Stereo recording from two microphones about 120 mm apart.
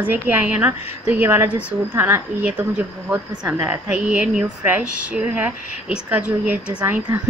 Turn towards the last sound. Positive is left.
turn(degrees=-20)  # may be behind; listen again after turning